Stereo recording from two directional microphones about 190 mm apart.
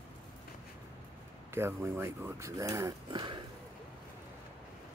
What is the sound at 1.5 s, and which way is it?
Speech, 15° right (ahead or behind).